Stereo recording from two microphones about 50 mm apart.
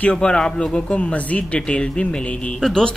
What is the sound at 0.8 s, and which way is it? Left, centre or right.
Speech, left.